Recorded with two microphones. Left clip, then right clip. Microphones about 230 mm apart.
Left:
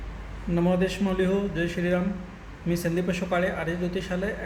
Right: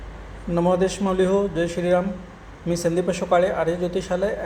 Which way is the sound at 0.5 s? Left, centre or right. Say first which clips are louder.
Right 5 dB; centre.